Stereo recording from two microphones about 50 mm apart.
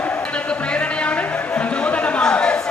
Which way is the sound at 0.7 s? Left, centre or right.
Left.